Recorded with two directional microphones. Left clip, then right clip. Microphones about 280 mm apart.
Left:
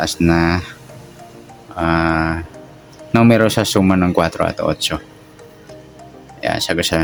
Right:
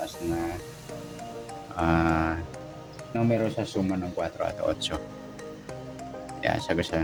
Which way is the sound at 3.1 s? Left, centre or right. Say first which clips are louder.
Left 14 dB; left.